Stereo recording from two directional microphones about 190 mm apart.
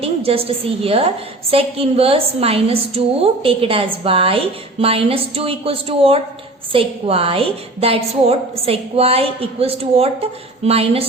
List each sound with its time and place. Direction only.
0.0 s a woman's voice: 30° right (ahead or behind)